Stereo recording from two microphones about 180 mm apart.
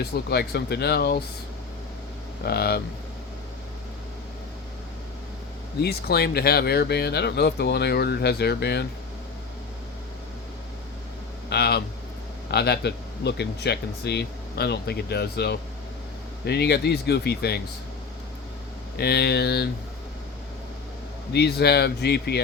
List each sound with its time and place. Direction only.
0.0 s speech: 65° left (ahead or behind)
2.4 s speech: 60° left (ahead or behind)
5.8 s speech: 60° left (ahead or behind)
11.4 s speech: 65° left (ahead or behind)
18.9 s speech: 65° left (ahead or behind)
21.3 s speech: 65° left (ahead or behind)